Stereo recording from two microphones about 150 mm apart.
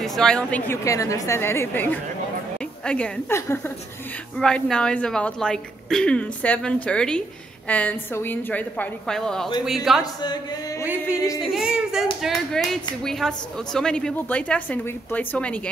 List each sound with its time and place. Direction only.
0.0 s a woman's voice: 5° left (ahead or behind)
4.4 s a woman's voice: 5° left (ahead or behind)
10.2 s a sound: 25° left (ahead or behind)
10.8 s music: 10° right (ahead or behind)
11.5 s a woman's voice: 5° right (ahead or behind)